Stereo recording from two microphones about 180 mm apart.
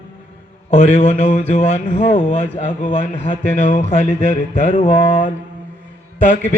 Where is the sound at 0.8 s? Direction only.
35° left (ahead or behind).